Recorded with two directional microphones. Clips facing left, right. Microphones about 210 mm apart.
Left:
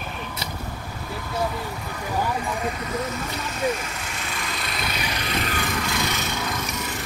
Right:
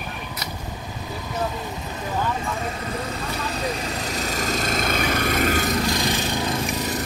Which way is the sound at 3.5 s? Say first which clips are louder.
Left 3 dB; 35° right (ahead or behind).